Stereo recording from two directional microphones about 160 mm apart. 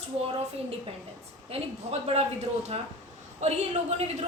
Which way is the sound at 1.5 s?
40° right (ahead or behind).